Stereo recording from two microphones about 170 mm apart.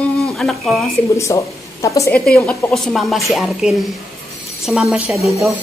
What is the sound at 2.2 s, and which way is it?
A woman's voice, 5° left (ahead or behind).